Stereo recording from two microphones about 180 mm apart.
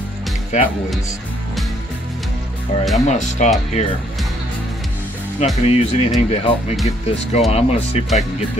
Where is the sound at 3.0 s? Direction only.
40° left (ahead or behind).